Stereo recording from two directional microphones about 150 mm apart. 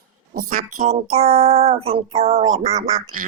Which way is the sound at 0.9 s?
45° right (ahead or behind).